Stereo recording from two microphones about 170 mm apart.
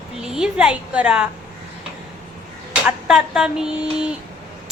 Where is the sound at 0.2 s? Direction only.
5° right (ahead or behind).